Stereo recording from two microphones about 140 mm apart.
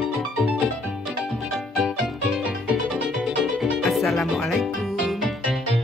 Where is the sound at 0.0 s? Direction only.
Centre (ahead or behind).